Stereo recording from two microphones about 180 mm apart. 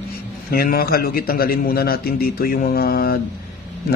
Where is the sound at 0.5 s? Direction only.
55° left (ahead or behind).